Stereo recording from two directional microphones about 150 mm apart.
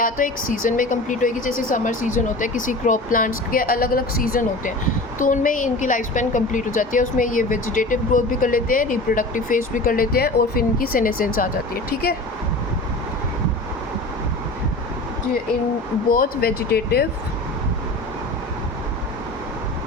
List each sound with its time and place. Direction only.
0.0 s speech: 65° left (ahead or behind)
16.1 s speech: 80° left